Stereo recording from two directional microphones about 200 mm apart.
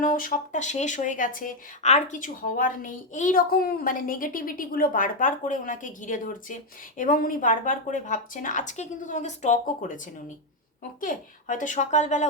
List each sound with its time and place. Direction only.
0.0 s speech: 45° left (ahead or behind)
11.0 s speech: 40° left (ahead or behind)